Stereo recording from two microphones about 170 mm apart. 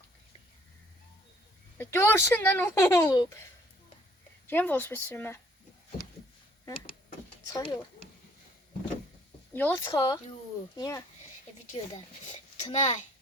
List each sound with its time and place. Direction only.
1.8 s speech: 15° left (ahead or behind)
4.4 s speech: 10° left (ahead or behind)
7.4 s speech: 20° left (ahead or behind)
9.5 s speech: 10° left (ahead or behind)
11.7 s a child's voice: 35° left (ahead or behind)